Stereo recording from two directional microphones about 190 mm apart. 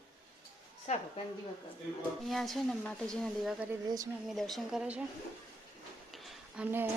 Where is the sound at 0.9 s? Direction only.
35° left (ahead or behind).